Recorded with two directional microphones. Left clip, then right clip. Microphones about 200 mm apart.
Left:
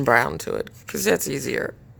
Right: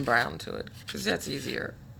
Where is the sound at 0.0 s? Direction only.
55° left (ahead or behind).